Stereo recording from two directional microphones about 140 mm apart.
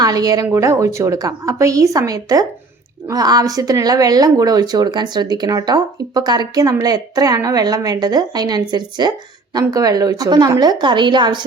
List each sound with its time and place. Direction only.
0.0 s a woman's voice: 25° right (ahead or behind)